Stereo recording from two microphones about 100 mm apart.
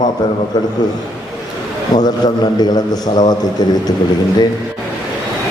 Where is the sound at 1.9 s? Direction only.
40° left (ahead or behind).